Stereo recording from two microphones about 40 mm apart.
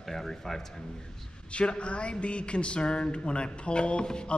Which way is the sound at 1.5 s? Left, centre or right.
Left.